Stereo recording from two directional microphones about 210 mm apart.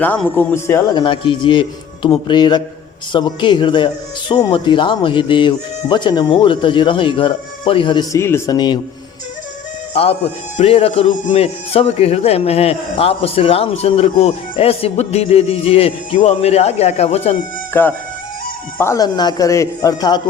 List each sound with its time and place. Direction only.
0.0 s speech: 10° left (ahead or behind)
1.0 s speech: 25° left (ahead or behind)
9.9 s speech: 30° left (ahead or behind)
17.7 s speech: 10° left (ahead or behind)